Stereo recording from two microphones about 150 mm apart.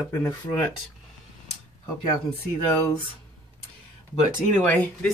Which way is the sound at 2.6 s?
10° left (ahead or behind).